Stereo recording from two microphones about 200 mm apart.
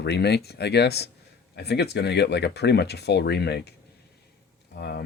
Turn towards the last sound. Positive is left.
turn(degrees=55)  # may be behind; listen again after turning